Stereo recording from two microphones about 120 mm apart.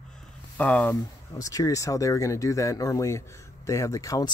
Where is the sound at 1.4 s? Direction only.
30° left (ahead or behind).